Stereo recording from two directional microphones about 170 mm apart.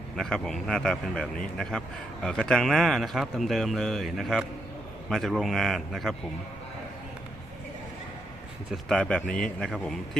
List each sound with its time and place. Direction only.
0.2 s a man's voice: 5° left (ahead or behind)
8.7 s a man's voice: 5° left (ahead or behind)